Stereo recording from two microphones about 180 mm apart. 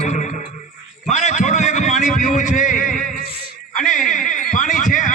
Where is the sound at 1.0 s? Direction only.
40° left (ahead or behind).